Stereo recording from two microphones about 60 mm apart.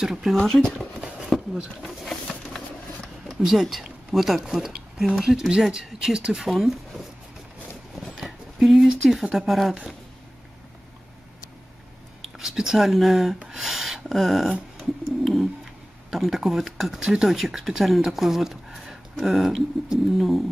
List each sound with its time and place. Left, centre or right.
0.0 s speech: centre
0.4 s speech: centre
0.9 s a sound: centre
1.3 s a sound: centre
3.3 s speech: centre
8.2 s speech: centre
12.4 s speech: centre
13.4 s a sound: centre
17.0 s speech: centre